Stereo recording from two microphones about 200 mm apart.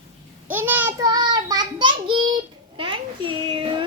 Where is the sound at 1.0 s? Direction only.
20° right (ahead or behind).